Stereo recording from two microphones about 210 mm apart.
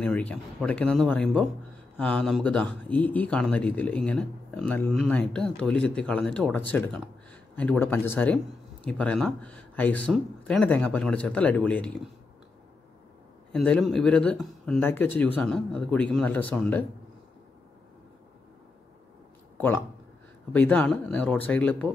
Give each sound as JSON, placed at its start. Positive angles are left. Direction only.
{"t": 0.0, "sound": "speech", "side_deg": 5}
{"t": 13.5, "sound": "speech", "side_deg": 5}
{"t": 20.5, "sound": "speech", "side_deg": 5}